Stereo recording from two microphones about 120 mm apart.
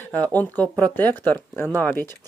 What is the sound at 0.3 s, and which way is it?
Speech, 15° left (ahead or behind).